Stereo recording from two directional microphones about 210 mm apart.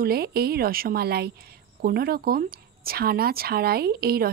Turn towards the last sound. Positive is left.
turn(degrees=-45)  # may be behind; listen again after turning